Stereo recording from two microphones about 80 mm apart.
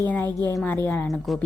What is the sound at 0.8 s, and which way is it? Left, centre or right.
Speech, left.